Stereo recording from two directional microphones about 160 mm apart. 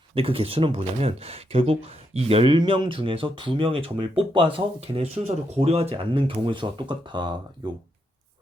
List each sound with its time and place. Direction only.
0.1 s speech: 35° right (ahead or behind)